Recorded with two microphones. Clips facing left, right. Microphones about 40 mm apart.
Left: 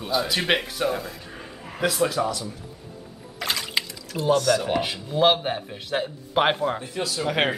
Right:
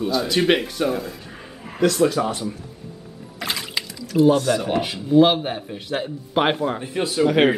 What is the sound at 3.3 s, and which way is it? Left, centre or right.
Music, centre.